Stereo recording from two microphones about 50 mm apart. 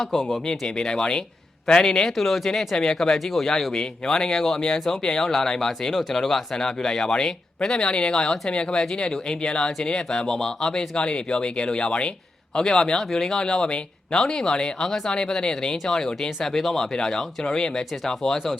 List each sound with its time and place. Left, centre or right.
0.1 s speech: centre